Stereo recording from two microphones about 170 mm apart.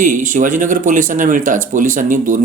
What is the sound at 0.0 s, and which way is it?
Speech, 50° right (ahead or behind).